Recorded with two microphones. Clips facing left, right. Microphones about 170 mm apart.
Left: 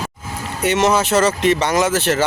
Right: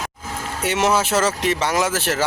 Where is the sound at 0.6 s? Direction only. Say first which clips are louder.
Left 3 dB; 5° right (ahead or behind).